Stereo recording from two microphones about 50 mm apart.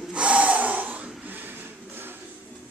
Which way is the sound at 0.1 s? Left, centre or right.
Right.